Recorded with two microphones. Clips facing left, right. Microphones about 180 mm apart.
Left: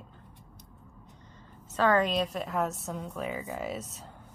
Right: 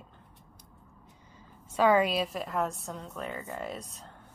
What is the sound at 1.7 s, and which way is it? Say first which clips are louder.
A woman's voice: right 1 dB; 10° right (ahead or behind).